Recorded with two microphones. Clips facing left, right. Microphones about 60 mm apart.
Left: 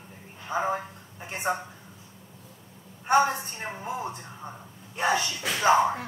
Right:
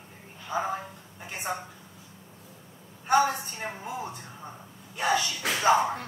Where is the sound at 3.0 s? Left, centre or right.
Left.